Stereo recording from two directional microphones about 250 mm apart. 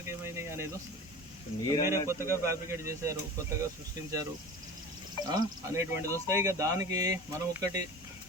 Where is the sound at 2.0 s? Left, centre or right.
Centre.